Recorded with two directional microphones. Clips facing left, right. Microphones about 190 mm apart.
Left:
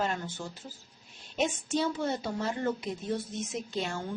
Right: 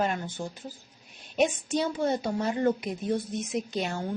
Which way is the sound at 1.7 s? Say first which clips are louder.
Right 3 dB; 15° right (ahead or behind).